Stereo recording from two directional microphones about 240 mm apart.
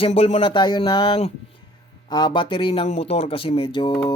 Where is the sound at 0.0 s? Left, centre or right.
Left.